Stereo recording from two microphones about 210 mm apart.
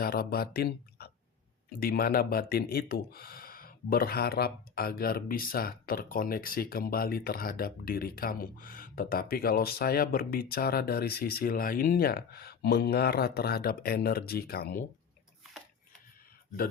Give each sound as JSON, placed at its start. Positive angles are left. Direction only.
{"t": 0.0, "sound": "speech", "side_deg": 45}